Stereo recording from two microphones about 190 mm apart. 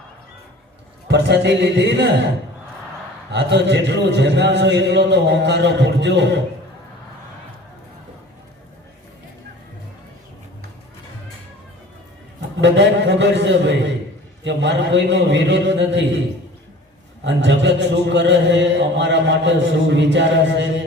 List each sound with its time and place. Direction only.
1.0 s a man's voice: 60° right (ahead or behind)
3.3 s a man's voice: 65° right (ahead or behind)
12.6 s a man's voice: 70° right (ahead or behind)
17.2 s a man's voice: 70° right (ahead or behind)